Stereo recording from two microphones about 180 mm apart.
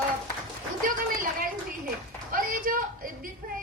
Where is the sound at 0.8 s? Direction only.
50° right (ahead or behind).